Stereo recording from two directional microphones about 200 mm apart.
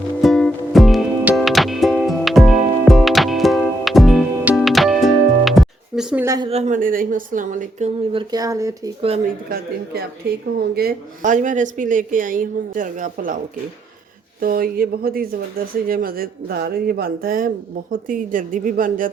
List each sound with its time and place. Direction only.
0.2 s music: centre (ahead or behind)
6.2 s speech: 15° right (ahead or behind)
6.5 s speech: 35° right (ahead or behind)
8.1 s speech: 20° right (ahead or behind)
9.0 s speech: 30° right (ahead or behind)
9.2 s speech: 50° right (ahead or behind)
14.4 s speech: 45° right (ahead or behind)